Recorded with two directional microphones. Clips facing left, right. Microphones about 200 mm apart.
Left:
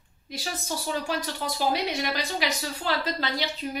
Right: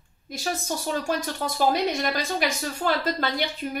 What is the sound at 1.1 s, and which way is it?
A woman's voice, 45° right (ahead or behind).